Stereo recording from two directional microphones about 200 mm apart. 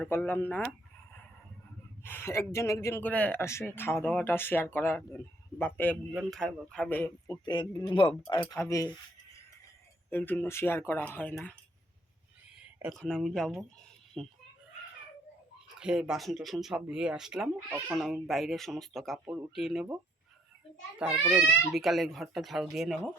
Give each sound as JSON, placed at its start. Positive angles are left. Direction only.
{"t": 0.0, "sound": "speech", "side_deg": 10}
{"t": 2.0, "sound": "speech", "side_deg": 10}
{"t": 7.4, "sound": "speech", "side_deg": 20}
{"t": 10.1, "sound": "speech", "side_deg": 10}
{"t": 13.0, "sound": "speech", "side_deg": 5}
{"t": 15.8, "sound": "speech", "side_deg": -5}
{"t": 21.2, "sound": "speech", "side_deg": 0}